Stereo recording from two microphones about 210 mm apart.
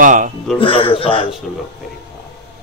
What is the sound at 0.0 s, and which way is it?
Speech, 40° right (ahead or behind).